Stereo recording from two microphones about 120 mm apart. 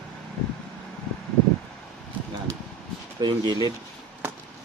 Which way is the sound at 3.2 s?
40° right (ahead or behind).